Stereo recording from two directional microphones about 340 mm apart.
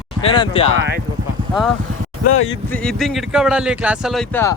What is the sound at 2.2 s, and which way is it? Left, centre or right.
Speech, left.